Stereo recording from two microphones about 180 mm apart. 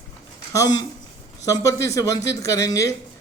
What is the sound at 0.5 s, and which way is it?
Speech, 20° left (ahead or behind).